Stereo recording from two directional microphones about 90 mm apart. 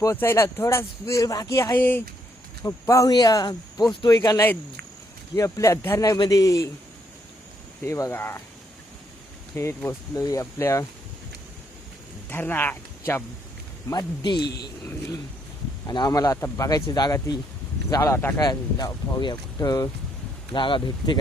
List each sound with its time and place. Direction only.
0.0 s speech: 30° left (ahead or behind)
1.7 s speech: 20° left (ahead or behind)
2.6 s speech: 35° left (ahead or behind)
3.1 s speech: 45° left (ahead or behind)
6.1 s speech: 45° left (ahead or behind)
7.9 s speech: 35° left (ahead or behind)
8.1 s speech: 25° left (ahead or behind)
9.5 s speech: 30° left (ahead or behind)
12.3 s speech: 20° left (ahead or behind)
13.9 s speech: 55° left (ahead or behind)
15.9 s speech: 50° left (ahead or behind)
17.8 s speech: 35° left (ahead or behind)
18.3 s speech: 45° left (ahead or behind)
20.5 s speech: 65° left (ahead or behind)